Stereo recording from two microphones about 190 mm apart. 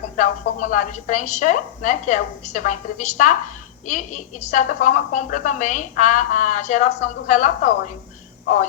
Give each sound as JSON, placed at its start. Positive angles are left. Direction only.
{"t": 0.2, "sound": "a woman's voice", "side_deg": 40}